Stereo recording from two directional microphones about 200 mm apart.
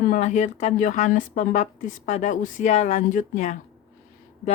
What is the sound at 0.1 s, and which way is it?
Speech, 35° left (ahead or behind).